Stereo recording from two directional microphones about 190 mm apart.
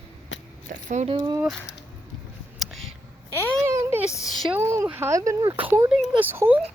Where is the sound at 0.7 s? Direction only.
40° right (ahead or behind).